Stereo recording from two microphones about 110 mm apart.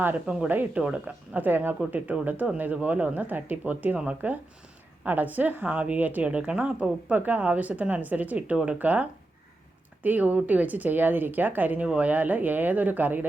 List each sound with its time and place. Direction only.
0.0 s a woman's voice: 15° right (ahead or behind)